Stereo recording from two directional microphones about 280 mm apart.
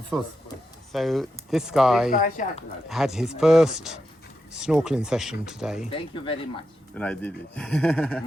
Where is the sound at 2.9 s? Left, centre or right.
Centre.